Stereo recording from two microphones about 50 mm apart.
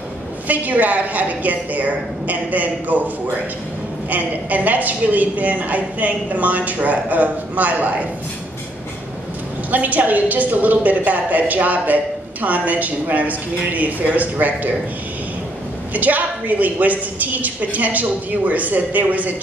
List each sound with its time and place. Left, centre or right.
0.5 s a woman's voice: right
4.1 s a woman's voice: right
9.7 s a woman's voice: right
15.9 s a woman's voice: right